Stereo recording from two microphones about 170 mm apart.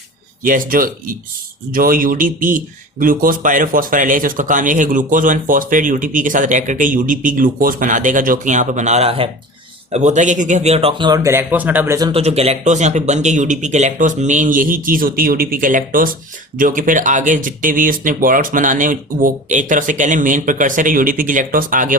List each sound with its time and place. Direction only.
0.4 s speech: 55° right (ahead or behind); by 11.9 s 10° right (ahead or behind)
12.1 s speech: 35° right (ahead or behind); by 21.9 s 55° right (ahead or behind)